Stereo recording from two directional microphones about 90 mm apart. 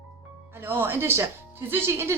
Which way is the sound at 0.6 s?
25° right (ahead or behind).